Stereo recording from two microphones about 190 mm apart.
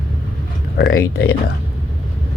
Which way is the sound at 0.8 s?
60° left (ahead or behind).